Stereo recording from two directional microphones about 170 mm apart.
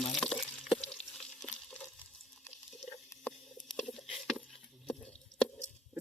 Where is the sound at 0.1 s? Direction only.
5° left (ahead or behind).